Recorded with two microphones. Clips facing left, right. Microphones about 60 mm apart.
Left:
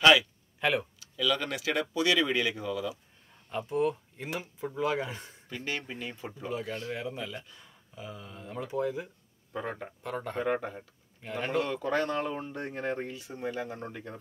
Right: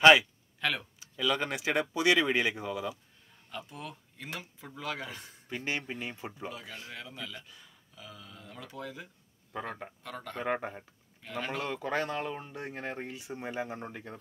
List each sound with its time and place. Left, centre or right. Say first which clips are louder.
0.0 s speech: right 2 dB; right
0.6 s speech: left 5 dB; centre
0.9 s speech: left 1 dB; right
3.5 s speech: left 13 dB; left
5.5 s speech: right 1 dB; right
6.5 s speech: left 9 dB; left
10.4 s speech: left 1 dB; right
11.2 s speech: left 5 dB; left
11.6 s a man's voice: left 3 dB; centre
12.2 s speech: left 3 dB; centre
13.1 s speech: left 2 dB; right